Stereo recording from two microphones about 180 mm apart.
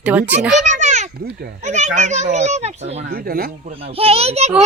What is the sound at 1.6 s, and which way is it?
Speech, 40° right (ahead or behind).